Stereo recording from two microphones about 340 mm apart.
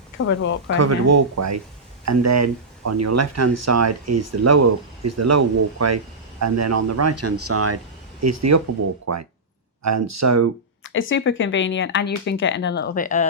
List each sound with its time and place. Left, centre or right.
0.2 s speech: left
0.8 s speech: right
10.8 s speech: left